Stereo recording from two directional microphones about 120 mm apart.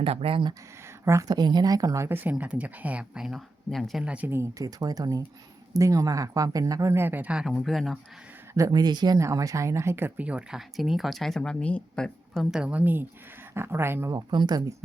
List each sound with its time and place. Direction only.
0.0 s speech: 50° right (ahead or behind)
1.3 s speech: 35° right (ahead or behind)
2.0 s speech: 15° right (ahead or behind); by 7.9 s centre (ahead or behind)
8.5 s speech: 30° right (ahead or behind)
9.1 s speech: 25° right (ahead or behind)
14.3 s speech: 35° right (ahead or behind)